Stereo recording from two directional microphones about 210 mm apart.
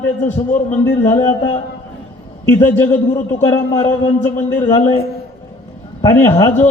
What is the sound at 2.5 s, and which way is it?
A man's voice, 10° left (ahead or behind).